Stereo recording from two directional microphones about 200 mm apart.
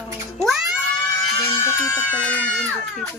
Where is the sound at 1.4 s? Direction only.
10° left (ahead or behind).